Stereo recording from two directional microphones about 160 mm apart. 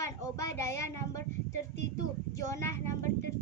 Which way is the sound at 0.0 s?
20° left (ahead or behind).